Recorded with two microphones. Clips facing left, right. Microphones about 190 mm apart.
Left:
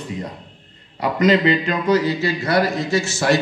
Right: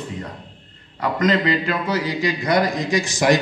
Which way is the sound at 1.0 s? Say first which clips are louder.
Left 3 dB; 10° left (ahead or behind).